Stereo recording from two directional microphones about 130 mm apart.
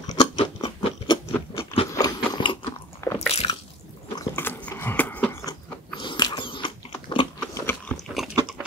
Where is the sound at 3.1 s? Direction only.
50° left (ahead or behind).